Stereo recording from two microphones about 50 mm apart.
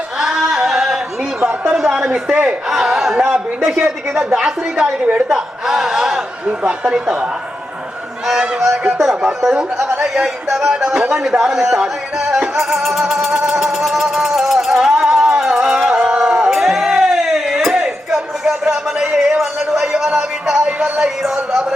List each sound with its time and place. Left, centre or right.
0.2 s singing: centre
1.9 s a man's voice: centre
2.6 s a sound: centre
3.2 s a man's voice: right
5.3 s a sound: centre
6.1 s a man's voice: right
8.3 s speech: centre
11.1 s music: centre
16.9 s a sound: centre
17.7 s music: centre
18.6 s a sound: centre
21.0 s speech: centre